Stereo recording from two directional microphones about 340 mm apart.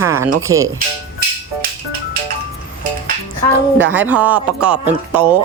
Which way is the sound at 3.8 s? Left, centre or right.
Centre.